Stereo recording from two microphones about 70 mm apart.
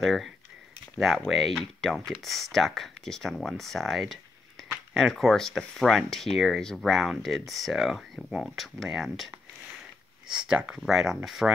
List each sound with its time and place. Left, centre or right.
0.0 s speech: centre